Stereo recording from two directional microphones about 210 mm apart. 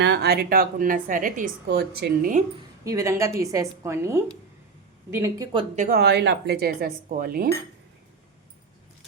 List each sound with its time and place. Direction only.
0.0 s a woman's voice: 50° right (ahead or behind)
2.8 s a woman's voice: 15° right (ahead or behind)
5.7 s a woman's voice: 40° right (ahead or behind)